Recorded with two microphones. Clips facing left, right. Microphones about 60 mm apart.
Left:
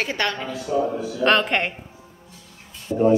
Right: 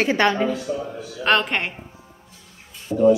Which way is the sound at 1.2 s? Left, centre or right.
Centre.